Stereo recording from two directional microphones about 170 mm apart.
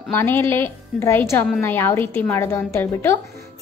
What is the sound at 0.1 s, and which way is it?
A woman's voice, 15° left (ahead or behind).